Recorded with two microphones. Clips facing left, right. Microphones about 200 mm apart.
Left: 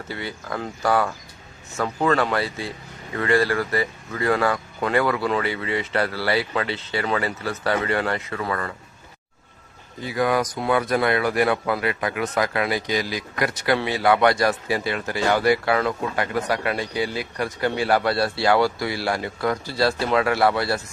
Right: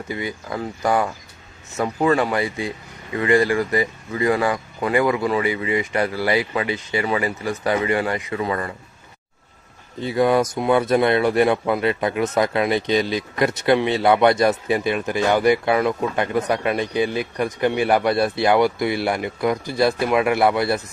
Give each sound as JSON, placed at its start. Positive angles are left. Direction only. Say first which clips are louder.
{"t": 0.1, "sound": "speech", "louder": "right 3 dB", "side_deg": -15}
{"t": 10.0, "sound": "speech", "louder": "right 4 dB", "side_deg": -25}